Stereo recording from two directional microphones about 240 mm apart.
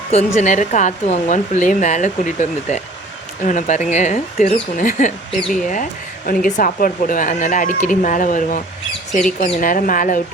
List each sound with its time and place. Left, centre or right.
0.1 s speech: left
5.4 s speech: centre
5.6 s speech: left